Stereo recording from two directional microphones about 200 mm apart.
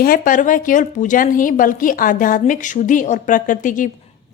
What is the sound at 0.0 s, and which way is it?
A woman's voice, 45° left (ahead or behind).